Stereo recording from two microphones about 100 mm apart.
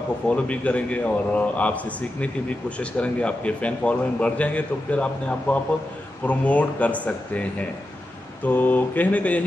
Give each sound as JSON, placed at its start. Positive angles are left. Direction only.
{"t": 0.3, "sound": "a man's voice", "side_deg": 10}
{"t": 8.5, "sound": "a man's voice", "side_deg": 20}